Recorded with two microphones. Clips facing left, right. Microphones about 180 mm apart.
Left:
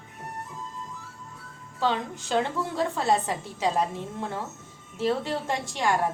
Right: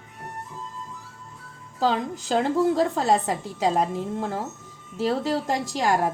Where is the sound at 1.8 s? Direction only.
35° right (ahead or behind).